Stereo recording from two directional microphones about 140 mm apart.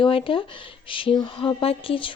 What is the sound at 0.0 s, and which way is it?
A woman's voice, 40° left (ahead or behind).